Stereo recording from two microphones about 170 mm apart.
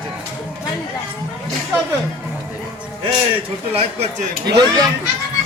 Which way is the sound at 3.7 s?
40° right (ahead or behind).